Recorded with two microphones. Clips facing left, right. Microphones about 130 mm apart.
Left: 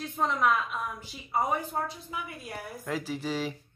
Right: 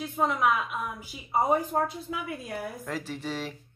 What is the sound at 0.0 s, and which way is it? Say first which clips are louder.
Speech: right 2 dB; 5° right (ahead or behind).